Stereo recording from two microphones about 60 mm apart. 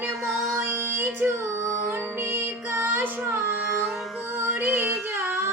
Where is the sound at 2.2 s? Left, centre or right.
Right.